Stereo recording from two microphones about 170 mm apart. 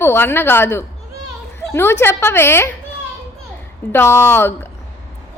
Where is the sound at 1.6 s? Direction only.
15° left (ahead or behind).